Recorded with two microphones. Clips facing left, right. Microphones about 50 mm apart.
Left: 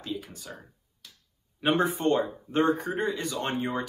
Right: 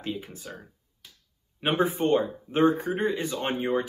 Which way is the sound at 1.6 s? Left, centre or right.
Centre.